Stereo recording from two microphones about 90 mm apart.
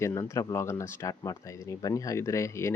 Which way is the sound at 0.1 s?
45° left (ahead or behind).